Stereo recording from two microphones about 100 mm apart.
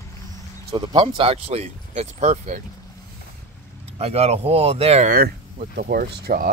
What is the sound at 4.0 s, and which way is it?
Speech, 90° right.